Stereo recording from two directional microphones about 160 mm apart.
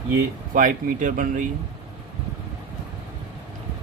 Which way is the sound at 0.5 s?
55° right (ahead or behind).